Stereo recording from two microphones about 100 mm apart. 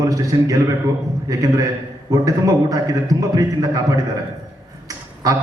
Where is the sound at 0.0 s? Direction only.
35° right (ahead or behind).